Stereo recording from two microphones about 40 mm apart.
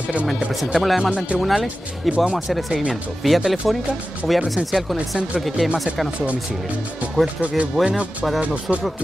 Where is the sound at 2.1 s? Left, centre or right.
Right.